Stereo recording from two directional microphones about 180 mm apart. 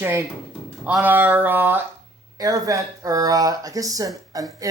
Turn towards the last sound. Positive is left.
turn(degrees=-20)  # may be behind; listen again after turning